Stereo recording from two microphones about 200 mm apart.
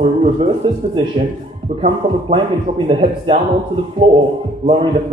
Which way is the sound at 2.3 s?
25° right (ahead or behind).